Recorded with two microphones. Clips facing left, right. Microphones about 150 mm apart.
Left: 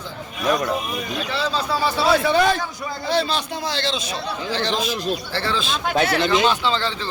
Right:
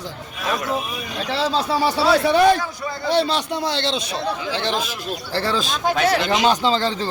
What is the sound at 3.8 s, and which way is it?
Speech, 65° right (ahead or behind).